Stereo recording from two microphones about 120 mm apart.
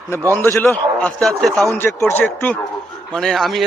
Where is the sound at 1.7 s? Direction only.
25° left (ahead or behind).